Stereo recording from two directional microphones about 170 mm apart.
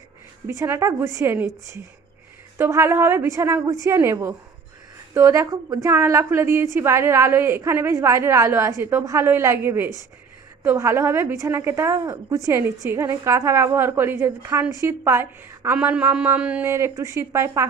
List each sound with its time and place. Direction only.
0.5 s a woman's voice: 20° right (ahead or behind)